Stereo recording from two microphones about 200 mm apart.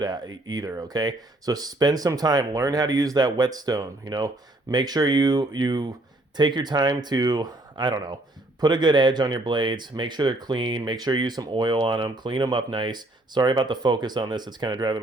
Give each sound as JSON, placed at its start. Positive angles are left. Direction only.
{"t": 0.0, "sound": "speech", "side_deg": -20}